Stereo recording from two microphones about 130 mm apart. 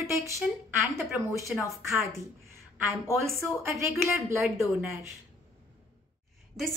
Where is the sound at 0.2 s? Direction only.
20° right (ahead or behind).